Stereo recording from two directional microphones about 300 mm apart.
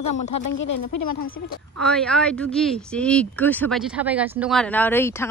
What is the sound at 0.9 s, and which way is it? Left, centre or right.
Speech, left.